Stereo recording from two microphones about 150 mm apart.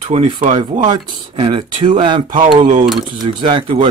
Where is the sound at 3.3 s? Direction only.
35° right (ahead or behind).